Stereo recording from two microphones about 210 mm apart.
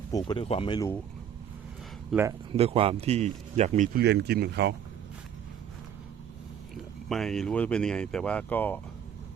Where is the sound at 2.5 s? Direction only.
25° right (ahead or behind).